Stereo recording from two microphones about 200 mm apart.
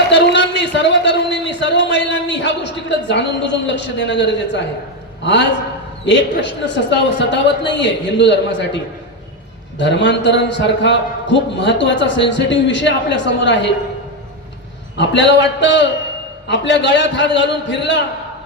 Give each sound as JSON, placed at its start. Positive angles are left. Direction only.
{"t": 0.1, "sound": "a sound", "side_deg": 60}
{"t": 5.2, "sound": "a man's voice", "side_deg": 60}
{"t": 9.7, "sound": "a man's voice", "side_deg": 60}
{"t": 14.9, "sound": "a man's voice", "side_deg": 60}